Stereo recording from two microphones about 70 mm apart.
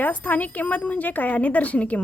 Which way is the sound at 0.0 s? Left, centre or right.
Left.